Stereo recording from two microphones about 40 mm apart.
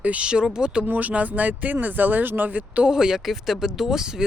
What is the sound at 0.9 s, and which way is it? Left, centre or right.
Speech, right.